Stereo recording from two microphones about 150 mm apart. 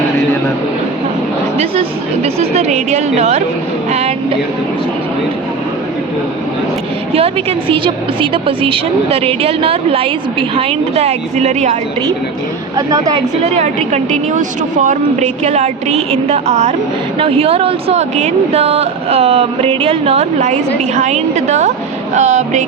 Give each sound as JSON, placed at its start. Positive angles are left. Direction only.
{"t": 2.2, "sound": "speech", "side_deg": -45}
{"t": 7.7, "sound": "a woman's voice", "side_deg": -35}
{"t": 12.7, "sound": "a woman's voice", "side_deg": -25}
{"t": 13.4, "sound": "speech", "side_deg": -50}